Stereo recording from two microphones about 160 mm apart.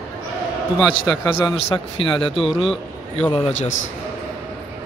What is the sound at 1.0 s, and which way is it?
Speech, 25° left (ahead or behind).